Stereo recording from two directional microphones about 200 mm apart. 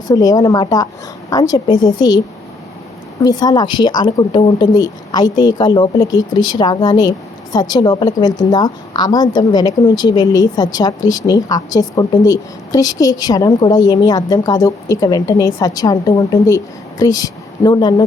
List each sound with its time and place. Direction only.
0.1 s a woman's voice: 20° left (ahead or behind)
3.2 s a woman's voice: 20° left (ahead or behind)